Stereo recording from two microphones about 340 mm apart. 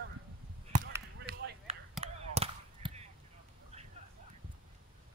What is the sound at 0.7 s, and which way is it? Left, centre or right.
Basketball bounce, right.